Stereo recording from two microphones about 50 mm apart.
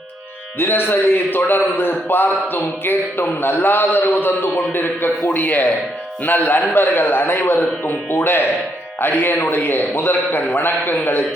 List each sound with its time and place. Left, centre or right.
0.6 s a man's voice: left